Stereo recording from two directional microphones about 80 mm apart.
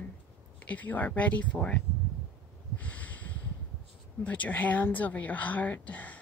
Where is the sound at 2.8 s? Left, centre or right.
Centre.